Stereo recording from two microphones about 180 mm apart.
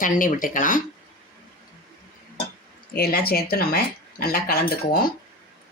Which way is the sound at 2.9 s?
60° left (ahead or behind).